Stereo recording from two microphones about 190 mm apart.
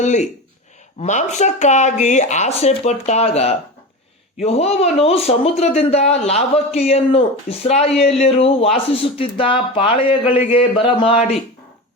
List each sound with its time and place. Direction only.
0.0 s speech: 40° left (ahead or behind)